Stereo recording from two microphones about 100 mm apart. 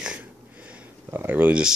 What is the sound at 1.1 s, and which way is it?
Speech, 20° right (ahead or behind).